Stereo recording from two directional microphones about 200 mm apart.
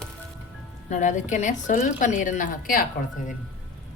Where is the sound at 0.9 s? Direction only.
40° left (ahead or behind).